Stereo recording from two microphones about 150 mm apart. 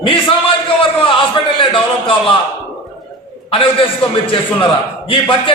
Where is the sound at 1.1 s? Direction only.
35° left (ahead or behind).